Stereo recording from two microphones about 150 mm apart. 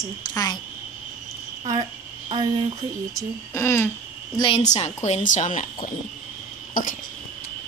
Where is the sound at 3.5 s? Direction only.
15° left (ahead or behind).